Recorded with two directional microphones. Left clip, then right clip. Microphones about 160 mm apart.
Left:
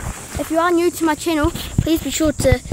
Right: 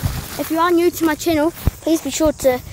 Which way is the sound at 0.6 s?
Centre (ahead or behind).